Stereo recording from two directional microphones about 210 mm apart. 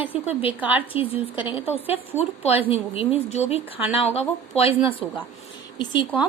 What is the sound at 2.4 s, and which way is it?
Speech, 25° left (ahead or behind).